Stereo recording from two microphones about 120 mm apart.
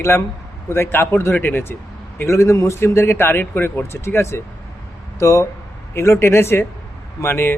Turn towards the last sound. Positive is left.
turn(degrees=20)  # may be behind; listen again after turning